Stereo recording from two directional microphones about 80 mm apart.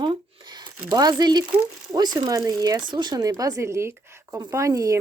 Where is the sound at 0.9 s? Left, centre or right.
Right.